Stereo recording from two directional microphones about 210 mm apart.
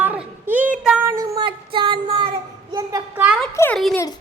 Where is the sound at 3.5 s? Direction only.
5° left (ahead or behind).